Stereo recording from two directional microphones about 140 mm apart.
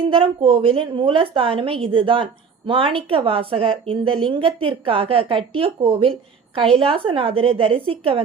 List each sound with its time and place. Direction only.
0.1 s a woman's voice: 40° right (ahead or behind)